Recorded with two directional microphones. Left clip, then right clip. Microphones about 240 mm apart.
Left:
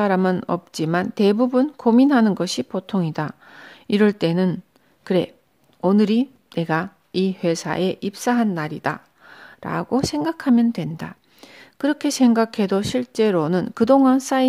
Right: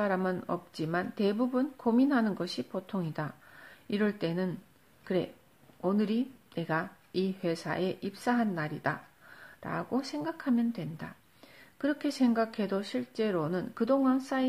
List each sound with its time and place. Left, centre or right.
0.0 s speech: left